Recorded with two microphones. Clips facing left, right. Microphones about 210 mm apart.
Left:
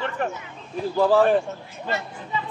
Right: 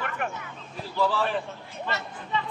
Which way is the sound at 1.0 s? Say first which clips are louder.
Left 8 dB; 45° left (ahead or behind).